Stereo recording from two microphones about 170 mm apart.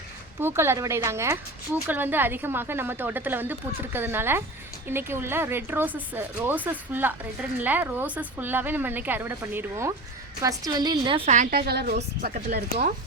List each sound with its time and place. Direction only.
0.3 s speech: 15° right (ahead or behind)
10.7 s a woman's voice: 25° right (ahead or behind)
11.5 s a woman's voice: 70° right (ahead or behind)